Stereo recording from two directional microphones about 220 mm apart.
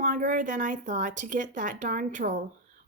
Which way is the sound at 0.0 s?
35° right (ahead or behind).